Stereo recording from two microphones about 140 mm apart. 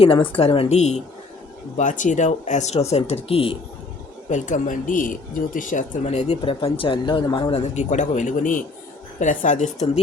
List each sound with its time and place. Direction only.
0.0 s speech: 40° left (ahead or behind)
1.7 s speech: 65° left (ahead or behind); by 3.6 s 40° left (ahead or behind)
4.3 s speech: 60° left (ahead or behind)
6.0 s speech: 50° left (ahead or behind); by 7.5 s 30° left (ahead or behind)
7.5 s speech: 55° left (ahead or behind)